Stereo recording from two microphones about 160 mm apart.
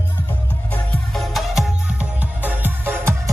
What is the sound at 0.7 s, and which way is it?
Music, centre (ahead or behind).